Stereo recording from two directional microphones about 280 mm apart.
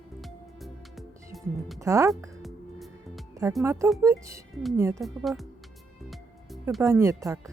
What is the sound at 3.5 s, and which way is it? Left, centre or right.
Speech, centre.